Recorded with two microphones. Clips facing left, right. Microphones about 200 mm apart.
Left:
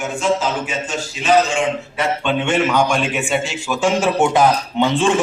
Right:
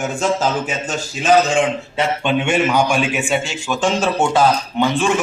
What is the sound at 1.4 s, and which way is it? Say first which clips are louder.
Speech: right 2 dB; 35° right (ahead or behind).